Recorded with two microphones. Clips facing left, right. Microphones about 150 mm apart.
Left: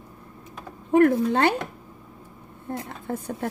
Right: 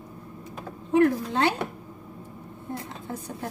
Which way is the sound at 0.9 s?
55° left (ahead or behind).